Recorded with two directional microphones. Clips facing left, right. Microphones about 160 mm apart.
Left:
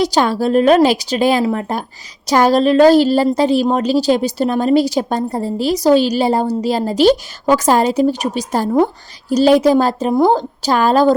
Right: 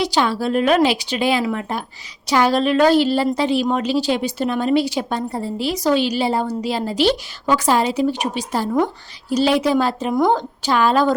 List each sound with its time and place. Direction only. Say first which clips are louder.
0.0 s a woman's voice: left 4 dB; 45° left (ahead or behind)